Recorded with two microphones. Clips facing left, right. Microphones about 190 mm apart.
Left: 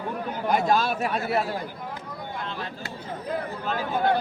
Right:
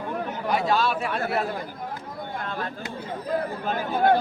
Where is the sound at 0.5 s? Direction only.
45° left (ahead or behind).